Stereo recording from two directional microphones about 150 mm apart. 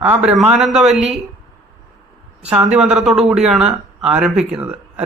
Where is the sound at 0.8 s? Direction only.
50° right (ahead or behind).